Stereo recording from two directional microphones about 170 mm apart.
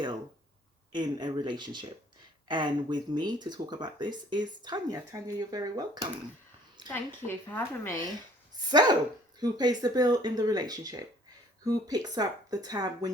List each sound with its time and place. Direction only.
0.9 s speech: 25° right (ahead or behind)
6.9 s a woman's voice: 10° left (ahead or behind)
8.7 s speech: 25° right (ahead or behind)